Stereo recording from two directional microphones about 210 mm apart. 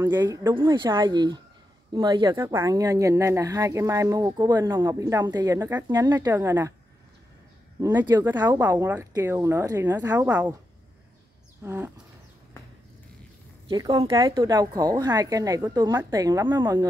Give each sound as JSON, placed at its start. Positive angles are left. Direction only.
{"t": 0.0, "sound": "a woman's voice", "side_deg": -15}
{"t": 7.8, "sound": "a woman's voice", "side_deg": -15}
{"t": 11.6, "sound": "a woman's voice", "side_deg": -10}
{"t": 13.7, "sound": "a woman's voice", "side_deg": -15}